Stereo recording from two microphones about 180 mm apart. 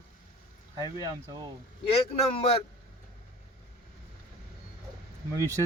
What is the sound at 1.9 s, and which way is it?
Speech, 35° left (ahead or behind).